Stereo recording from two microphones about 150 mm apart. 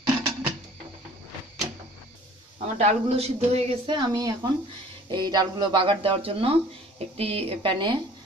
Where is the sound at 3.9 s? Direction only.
30° right (ahead or behind).